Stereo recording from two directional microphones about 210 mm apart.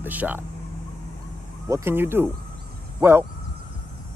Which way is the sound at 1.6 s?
15° right (ahead or behind).